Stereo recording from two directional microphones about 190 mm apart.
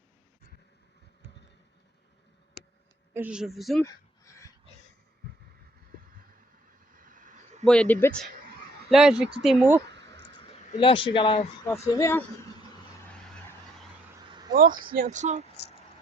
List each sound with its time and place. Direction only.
3.1 s speech: 10° right (ahead or behind)
3.8 s a sound: 15° left (ahead or behind)
6.9 s vehicle: 45° right (ahead or behind)
7.6 s speech: 5° left (ahead or behind)
9.9 s a sound: 65° right (ahead or behind)
10.3 s speech: 25° left (ahead or behind)
11.7 s speech: 15° left (ahead or behind)
14.5 s speech: 50° right (ahead or behind)